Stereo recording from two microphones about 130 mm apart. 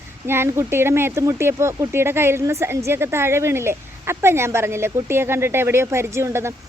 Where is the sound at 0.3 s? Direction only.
20° right (ahead or behind).